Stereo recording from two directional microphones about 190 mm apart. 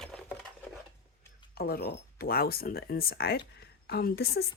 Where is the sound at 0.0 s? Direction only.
5° left (ahead or behind).